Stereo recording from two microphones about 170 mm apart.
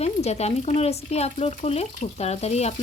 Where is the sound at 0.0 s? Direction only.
40° left (ahead or behind).